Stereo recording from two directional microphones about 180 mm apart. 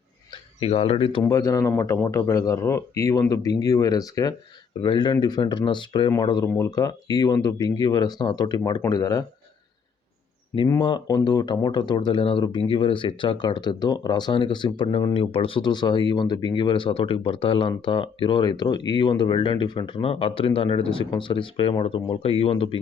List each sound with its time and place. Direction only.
0.6 s speech: 35° left (ahead or behind)
1.2 s speech: 20° left (ahead or behind)
10.7 s speech: 25° left (ahead or behind)